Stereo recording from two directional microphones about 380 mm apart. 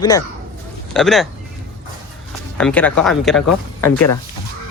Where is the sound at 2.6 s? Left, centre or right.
Centre.